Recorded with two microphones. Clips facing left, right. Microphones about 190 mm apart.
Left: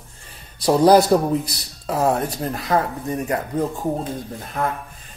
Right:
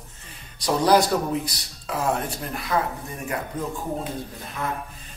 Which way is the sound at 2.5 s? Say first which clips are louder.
Left 4 dB; 45° left (ahead or behind).